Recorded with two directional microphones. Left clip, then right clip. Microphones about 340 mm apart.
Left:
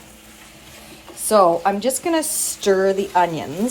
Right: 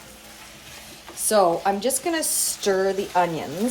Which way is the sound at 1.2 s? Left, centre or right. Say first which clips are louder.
Left 4 dB; centre.